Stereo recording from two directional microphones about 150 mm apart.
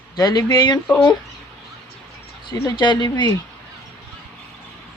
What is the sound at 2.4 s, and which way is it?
Speech, 30° left (ahead or behind).